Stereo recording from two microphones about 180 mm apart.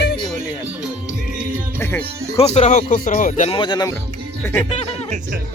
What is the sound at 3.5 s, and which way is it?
Speech, 25° left (ahead or behind).